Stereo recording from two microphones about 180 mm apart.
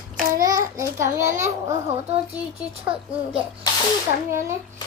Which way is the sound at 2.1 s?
35° right (ahead or behind).